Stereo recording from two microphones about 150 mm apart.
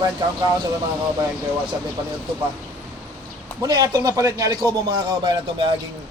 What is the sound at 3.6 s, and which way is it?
A man's voice, 25° right (ahead or behind).